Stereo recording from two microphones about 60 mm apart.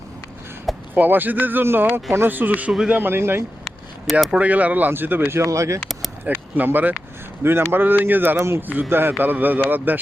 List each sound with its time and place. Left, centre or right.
0.9 s a man's voice: right
2.7 s speech: centre
3.0 s a man's voice: right
4.1 s speech: centre
4.4 s a man's voice: right
5.4 s speech: right
6.2 s a man's voice: right
8.4 s a man's voice: right
8.6 s a man's voice: right